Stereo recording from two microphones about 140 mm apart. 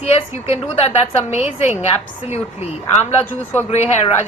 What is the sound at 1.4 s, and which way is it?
Speech, 15° right (ahead or behind).